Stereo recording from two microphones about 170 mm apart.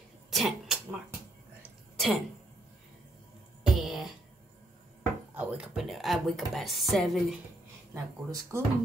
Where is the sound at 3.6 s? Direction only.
Centre (ahead or behind).